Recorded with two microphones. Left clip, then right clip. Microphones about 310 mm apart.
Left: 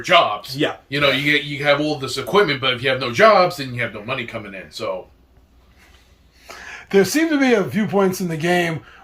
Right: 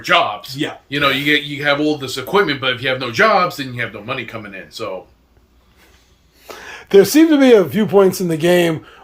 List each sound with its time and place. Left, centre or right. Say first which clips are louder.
0.9 s speech: right 3 dB; centre
6.4 s speech: right 2 dB; right